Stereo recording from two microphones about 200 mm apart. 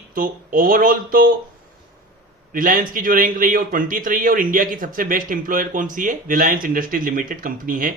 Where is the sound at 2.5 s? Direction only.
45° right (ahead or behind).